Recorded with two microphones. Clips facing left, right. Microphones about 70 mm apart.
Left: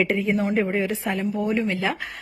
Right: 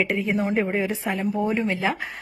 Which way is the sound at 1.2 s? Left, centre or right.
Right.